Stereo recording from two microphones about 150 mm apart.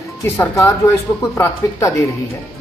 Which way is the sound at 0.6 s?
20° left (ahead or behind).